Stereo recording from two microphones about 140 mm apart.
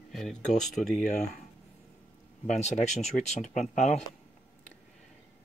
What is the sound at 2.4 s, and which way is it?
Speech, 55° left (ahead or behind).